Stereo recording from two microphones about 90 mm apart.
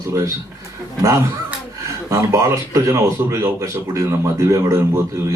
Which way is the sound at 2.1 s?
35° right (ahead or behind).